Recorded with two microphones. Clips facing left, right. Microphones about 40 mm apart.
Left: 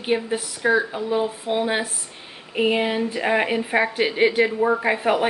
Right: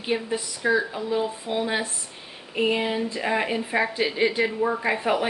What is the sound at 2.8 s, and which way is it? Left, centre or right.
Speech, left.